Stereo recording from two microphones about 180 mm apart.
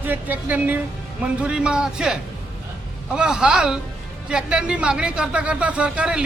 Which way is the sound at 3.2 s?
5° right (ahead or behind).